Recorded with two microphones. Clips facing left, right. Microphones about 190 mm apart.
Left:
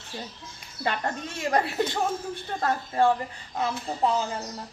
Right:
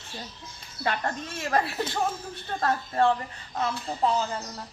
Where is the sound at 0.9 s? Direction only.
15° left (ahead or behind).